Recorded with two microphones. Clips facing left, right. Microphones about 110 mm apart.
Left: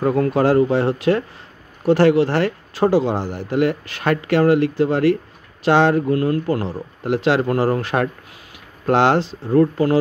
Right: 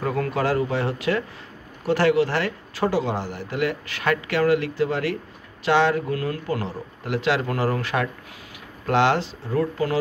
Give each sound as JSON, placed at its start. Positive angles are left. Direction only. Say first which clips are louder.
{"t": 0.0, "sound": "speech", "louder": "left 7 dB", "side_deg": 30}